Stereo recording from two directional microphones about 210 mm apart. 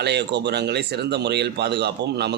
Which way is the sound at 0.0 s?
55° right (ahead or behind).